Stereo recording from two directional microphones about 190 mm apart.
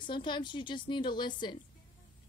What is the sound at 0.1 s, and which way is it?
Speech, 25° left (ahead or behind).